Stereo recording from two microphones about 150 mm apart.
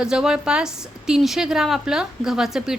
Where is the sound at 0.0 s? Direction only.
5° right (ahead or behind).